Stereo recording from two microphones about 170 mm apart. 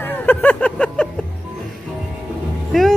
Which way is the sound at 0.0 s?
10° left (ahead or behind).